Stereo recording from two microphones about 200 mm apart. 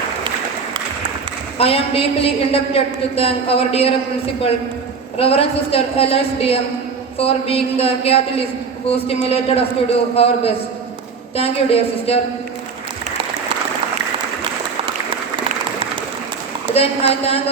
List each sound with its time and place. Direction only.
1.5 s a woman's voice: 30° left (ahead or behind)
5.1 s a woman's voice: 30° left (ahead or behind)
16.7 s a woman's voice: 30° left (ahead or behind)